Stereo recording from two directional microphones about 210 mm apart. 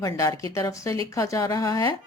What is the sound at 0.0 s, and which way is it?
Speech, 15° left (ahead or behind).